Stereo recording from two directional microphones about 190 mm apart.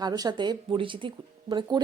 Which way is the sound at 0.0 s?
20° right (ahead or behind).